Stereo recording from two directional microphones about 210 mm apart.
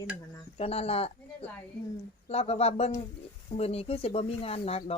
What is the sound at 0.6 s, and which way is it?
Speech, 30° left (ahead or behind).